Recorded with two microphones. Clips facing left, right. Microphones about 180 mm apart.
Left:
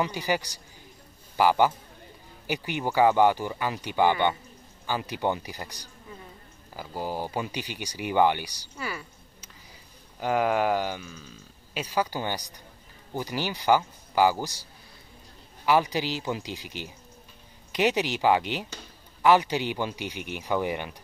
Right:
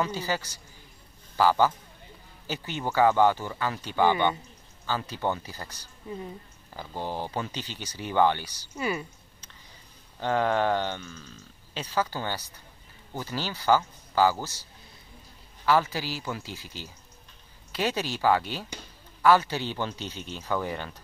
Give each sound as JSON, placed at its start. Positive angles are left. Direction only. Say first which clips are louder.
{"t": 0.0, "sound": "a man's voice", "louder": "left 2 dB", "side_deg": 15}
{"t": 6.8, "sound": "speech", "louder": "left 1 dB", "side_deg": 10}
{"t": 8.7, "sound": "speech", "louder": "right 6 dB", "side_deg": -20}
{"t": 10.2, "sound": "speech", "louder": "left 1 dB", "side_deg": 10}